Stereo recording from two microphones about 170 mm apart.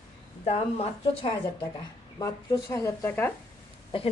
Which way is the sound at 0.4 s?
40° left (ahead or behind).